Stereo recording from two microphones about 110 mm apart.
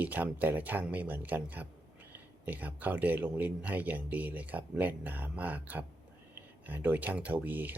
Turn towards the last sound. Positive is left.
turn(degrees=-15)  # may be behind; listen again after turning